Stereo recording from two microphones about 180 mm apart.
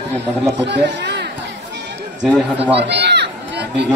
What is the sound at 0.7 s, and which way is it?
Chatter, 70° right (ahead or behind).